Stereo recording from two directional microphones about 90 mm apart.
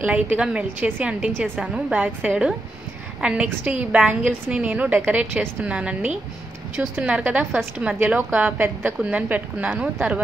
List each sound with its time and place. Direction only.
0.0 s a woman's voice: 15° right (ahead or behind)